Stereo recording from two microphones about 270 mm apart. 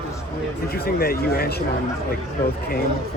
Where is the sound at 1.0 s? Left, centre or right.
Left.